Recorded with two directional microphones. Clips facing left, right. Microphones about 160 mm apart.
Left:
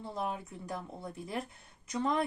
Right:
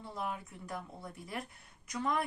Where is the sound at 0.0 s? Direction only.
25° left (ahead or behind).